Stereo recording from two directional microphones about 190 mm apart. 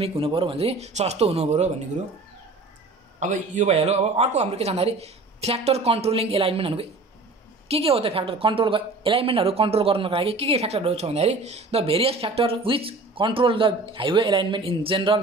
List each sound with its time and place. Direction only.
0.0 s speech: 30° right (ahead or behind)
3.2 s a woman's voice: 40° right (ahead or behind)